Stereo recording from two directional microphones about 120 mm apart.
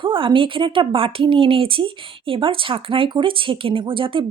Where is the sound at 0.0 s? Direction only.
45° right (ahead or behind).